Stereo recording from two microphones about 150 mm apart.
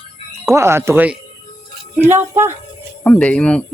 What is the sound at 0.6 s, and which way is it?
Speech, 15° right (ahead or behind).